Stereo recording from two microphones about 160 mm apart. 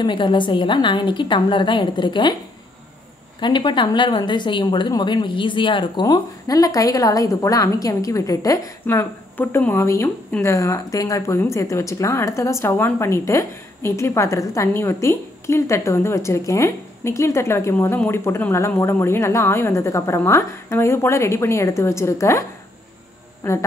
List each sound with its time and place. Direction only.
0.0 s a woman's voice: 30° left (ahead or behind)
3.3 s a woman's voice: 30° left (ahead or behind)